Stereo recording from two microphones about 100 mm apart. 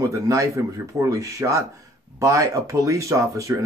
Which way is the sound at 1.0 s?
30° right (ahead or behind).